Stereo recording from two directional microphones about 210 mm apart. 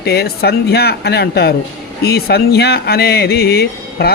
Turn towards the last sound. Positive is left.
turn(degrees=50)  # may be behind; listen again after turning